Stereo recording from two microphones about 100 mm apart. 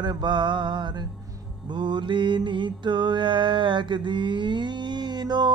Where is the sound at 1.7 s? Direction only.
50° right (ahead or behind).